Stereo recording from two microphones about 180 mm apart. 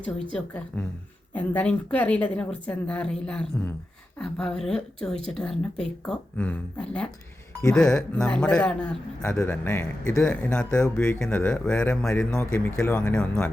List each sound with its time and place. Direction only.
0.0 s a man's voice: 5° left (ahead or behind)